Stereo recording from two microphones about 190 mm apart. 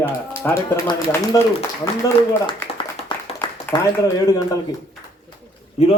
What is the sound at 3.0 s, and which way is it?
Clapping, 35° left (ahead or behind).